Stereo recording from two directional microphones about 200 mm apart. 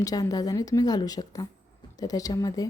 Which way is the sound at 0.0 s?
20° left (ahead or behind).